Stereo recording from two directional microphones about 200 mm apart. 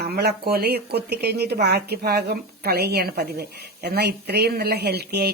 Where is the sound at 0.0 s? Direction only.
55° right (ahead or behind).